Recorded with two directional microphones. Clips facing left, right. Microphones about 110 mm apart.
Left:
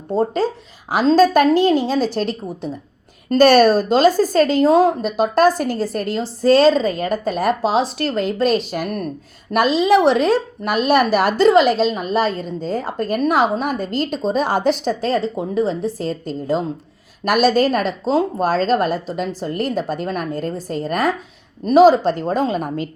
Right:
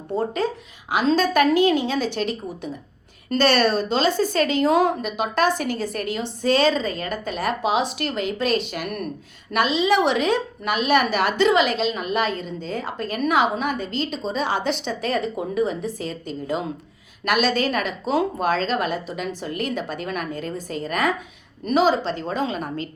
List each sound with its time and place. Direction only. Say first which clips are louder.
0.1 s a woman's voice: left 5 dB; 30° left (ahead or behind)